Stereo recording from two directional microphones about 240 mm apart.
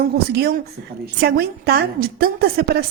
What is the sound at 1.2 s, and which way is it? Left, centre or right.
Speech, right.